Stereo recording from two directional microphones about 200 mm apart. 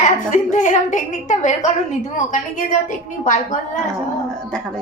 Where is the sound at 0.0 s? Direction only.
40° left (ahead or behind).